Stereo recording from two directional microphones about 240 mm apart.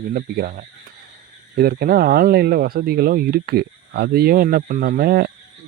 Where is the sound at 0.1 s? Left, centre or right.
Right.